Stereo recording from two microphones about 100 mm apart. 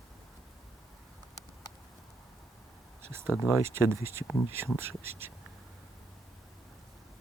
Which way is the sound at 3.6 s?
25° right (ahead or behind).